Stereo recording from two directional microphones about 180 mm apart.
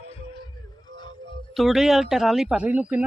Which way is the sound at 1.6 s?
Centre (ahead or behind).